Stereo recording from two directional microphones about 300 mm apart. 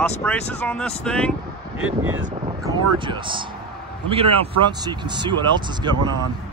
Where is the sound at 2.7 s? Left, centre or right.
Centre.